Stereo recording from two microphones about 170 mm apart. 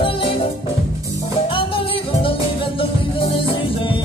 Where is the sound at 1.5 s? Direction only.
30° left (ahead or behind).